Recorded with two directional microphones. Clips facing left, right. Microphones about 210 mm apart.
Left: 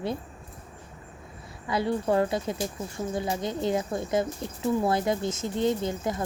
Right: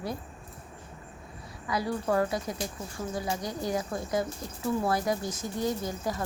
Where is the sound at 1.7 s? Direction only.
25° left (ahead or behind).